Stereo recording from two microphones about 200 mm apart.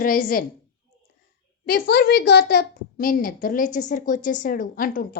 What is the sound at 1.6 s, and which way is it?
A child's voice, 50° left (ahead or behind).